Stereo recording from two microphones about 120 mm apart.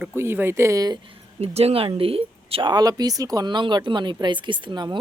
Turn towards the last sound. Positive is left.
turn(degrees=-40)  # may be behind; listen again after turning